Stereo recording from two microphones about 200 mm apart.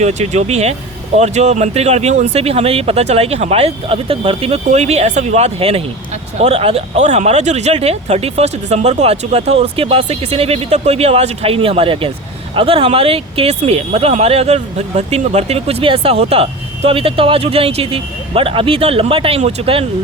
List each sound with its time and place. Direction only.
0.0 s speech: 35° right (ahead or behind)